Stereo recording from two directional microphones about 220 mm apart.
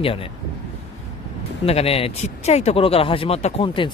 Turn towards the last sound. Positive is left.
turn(degrees=25)  # may be behind; listen again after turning